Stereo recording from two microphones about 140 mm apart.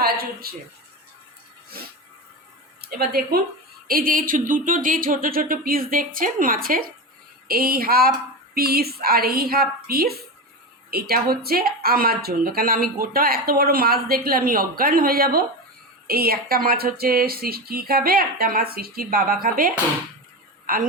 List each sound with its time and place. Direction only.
0.0 s a sound: 90° right
1.7 s speech: 90° right
3.0 s speech: 90° right